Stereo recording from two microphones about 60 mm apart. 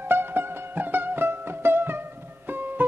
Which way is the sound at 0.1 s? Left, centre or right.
Right.